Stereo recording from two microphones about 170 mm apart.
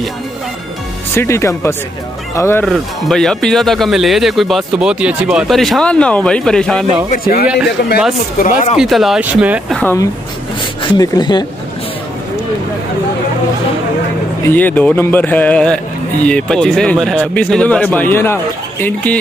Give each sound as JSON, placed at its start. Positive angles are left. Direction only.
{"t": 1.1, "sound": "a man's voice", "side_deg": 15}
{"t": 2.6, "sound": "speech", "side_deg": 0}
{"t": 7.1, "sound": "speech", "side_deg": 55}
{"t": 8.7, "sound": "speech", "side_deg": 0}
{"t": 9.8, "sound": "a man's voice", "side_deg": 10}
{"t": 10.8, "sound": "speech", "side_deg": 25}
{"t": 14.5, "sound": "a man's voice", "side_deg": 10}